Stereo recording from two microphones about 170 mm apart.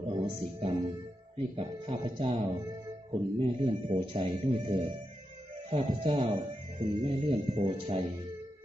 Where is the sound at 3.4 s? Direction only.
30° right (ahead or behind).